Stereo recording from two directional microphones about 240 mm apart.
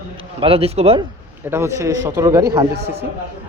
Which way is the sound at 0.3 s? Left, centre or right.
Right.